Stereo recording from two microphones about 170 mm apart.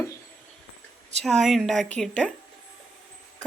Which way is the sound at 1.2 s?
Centre (ahead or behind).